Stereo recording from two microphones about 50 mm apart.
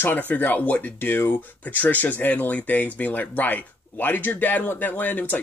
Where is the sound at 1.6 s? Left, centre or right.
Left.